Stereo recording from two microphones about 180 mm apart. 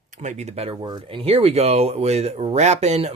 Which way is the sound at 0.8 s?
25° right (ahead or behind).